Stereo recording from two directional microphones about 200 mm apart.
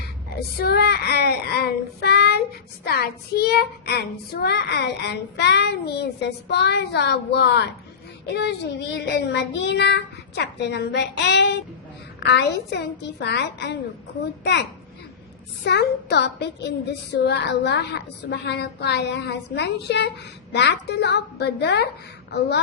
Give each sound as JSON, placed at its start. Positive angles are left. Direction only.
{"t": 0.6, "sound": "a child's voice", "side_deg": 55}